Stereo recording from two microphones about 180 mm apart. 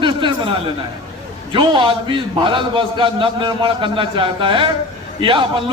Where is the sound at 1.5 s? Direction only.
25° right (ahead or behind).